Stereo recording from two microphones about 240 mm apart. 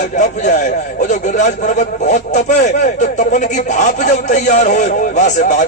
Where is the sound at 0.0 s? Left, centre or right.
Left.